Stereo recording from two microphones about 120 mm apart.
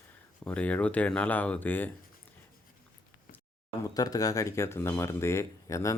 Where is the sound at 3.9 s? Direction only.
30° left (ahead or behind).